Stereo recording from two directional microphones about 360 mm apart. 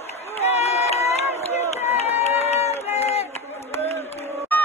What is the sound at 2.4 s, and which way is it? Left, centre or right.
Run, centre.